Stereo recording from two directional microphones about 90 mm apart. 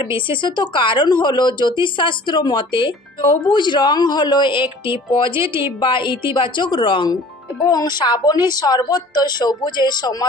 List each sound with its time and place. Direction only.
0.0 s a woman's voice: 65° left (ahead or behind)
7.6 s a woman's voice: 45° left (ahead or behind)